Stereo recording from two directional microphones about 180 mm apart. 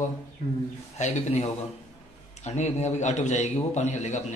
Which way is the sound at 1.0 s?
35° left (ahead or behind).